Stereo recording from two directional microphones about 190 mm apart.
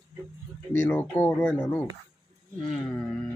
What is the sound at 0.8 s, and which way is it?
Speech, 10° left (ahead or behind).